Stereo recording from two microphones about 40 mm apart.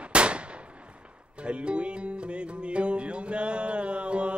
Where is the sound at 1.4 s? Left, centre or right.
Right.